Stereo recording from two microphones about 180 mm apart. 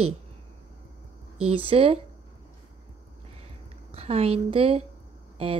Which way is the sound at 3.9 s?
35° right (ahead or behind).